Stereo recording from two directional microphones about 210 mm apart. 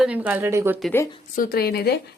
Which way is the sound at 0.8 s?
10° left (ahead or behind).